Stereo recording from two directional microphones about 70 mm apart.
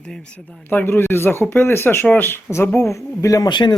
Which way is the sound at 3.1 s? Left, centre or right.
Left.